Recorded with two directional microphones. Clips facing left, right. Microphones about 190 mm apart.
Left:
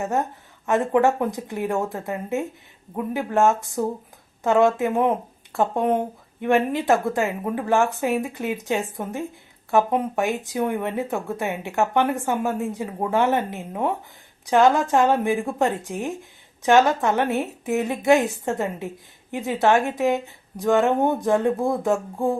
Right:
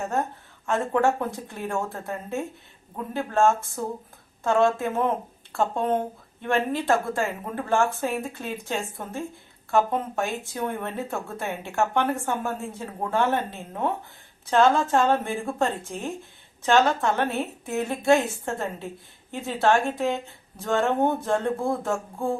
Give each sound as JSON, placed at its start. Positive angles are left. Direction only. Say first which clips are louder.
{"t": 0.0, "sound": "speech", "louder": "left 3 dB", "side_deg": 20}